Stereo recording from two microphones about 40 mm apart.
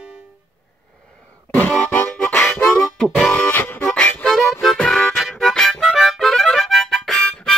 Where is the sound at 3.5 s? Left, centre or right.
Left.